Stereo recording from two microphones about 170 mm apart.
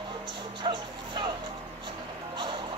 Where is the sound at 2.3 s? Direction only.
25° right (ahead or behind).